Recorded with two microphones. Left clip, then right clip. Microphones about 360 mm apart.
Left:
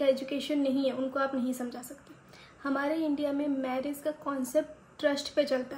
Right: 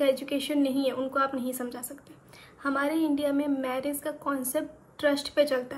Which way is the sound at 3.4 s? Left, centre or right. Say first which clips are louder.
Right 2 dB; centre.